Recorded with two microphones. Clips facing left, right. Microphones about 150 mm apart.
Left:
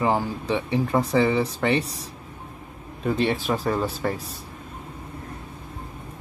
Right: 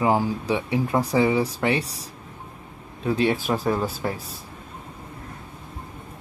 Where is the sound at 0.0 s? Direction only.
10° right (ahead or behind).